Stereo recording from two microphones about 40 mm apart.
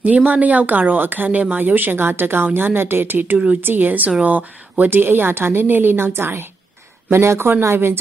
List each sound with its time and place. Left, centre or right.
0.0 s a woman's voice: right
4.8 s a woman's voice: right
7.1 s a woman's voice: right